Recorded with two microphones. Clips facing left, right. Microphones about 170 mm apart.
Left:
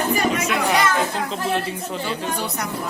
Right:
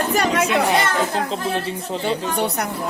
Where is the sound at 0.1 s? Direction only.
80° right.